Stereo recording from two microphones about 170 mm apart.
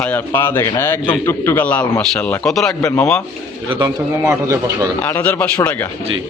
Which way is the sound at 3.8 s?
15° right (ahead or behind).